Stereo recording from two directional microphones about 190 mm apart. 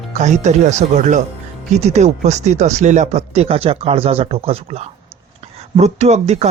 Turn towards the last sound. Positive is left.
turn(degrees=-35)  # may be behind; listen again after turning